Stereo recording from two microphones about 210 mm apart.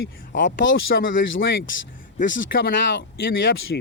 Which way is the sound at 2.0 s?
40° left (ahead or behind).